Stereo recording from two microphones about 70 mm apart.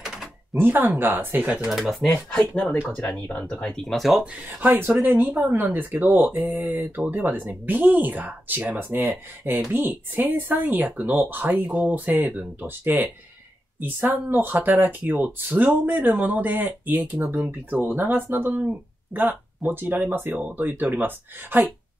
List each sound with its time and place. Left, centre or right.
0.6 s speech: right
1.7 s speech: centre
3.3 s speech: left
3.6 s speech: centre
4.6 s speech: right